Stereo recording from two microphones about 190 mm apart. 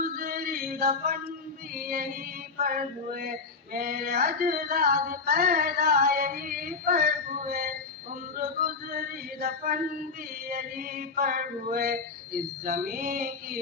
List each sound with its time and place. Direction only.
0.0 s male singing: 50° right (ahead or behind)
2.6 s music: 50° right (ahead or behind)